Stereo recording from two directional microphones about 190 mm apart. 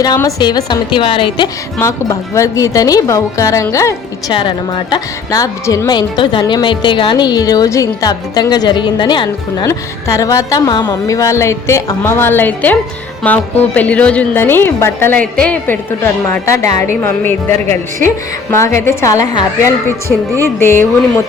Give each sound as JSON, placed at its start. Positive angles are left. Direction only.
{"t": 0.0, "sound": "a woman's voice", "side_deg": 20}